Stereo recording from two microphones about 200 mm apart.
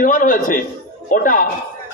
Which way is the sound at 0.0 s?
40° left (ahead or behind).